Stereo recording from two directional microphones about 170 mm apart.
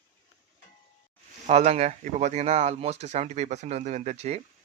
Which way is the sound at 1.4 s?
40° right (ahead or behind).